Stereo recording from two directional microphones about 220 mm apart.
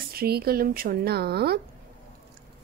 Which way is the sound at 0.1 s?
45° right (ahead or behind).